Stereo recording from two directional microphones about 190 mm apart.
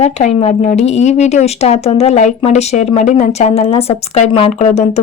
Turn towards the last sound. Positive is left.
turn(degrees=35)  # may be behind; listen again after turning